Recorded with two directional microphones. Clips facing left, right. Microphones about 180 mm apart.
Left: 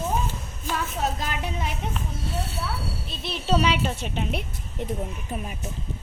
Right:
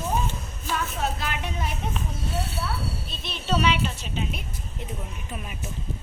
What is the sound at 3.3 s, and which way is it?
Speech, 35° left (ahead or behind).